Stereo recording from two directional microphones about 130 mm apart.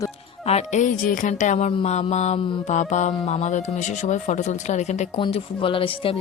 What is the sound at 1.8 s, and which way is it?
Mantra, 60° left (ahead or behind).